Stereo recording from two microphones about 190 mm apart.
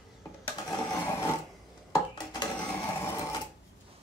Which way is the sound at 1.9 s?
20° left (ahead or behind).